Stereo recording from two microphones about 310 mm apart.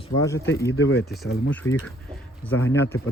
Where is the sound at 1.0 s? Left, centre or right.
Centre.